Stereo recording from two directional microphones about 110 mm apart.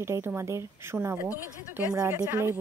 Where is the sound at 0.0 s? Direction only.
20° right (ahead or behind).